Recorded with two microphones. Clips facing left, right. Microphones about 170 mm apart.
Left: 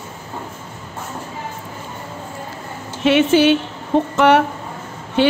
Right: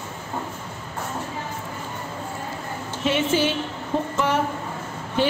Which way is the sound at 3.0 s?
75° left (ahead or behind).